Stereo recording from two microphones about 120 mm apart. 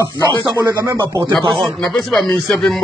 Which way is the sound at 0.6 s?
25° right (ahead or behind).